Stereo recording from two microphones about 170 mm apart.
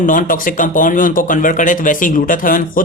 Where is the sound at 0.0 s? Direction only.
50° left (ahead or behind).